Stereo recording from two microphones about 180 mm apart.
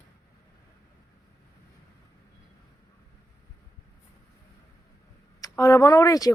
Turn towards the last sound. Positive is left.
turn(degrees=20)  # may be behind; listen again after turning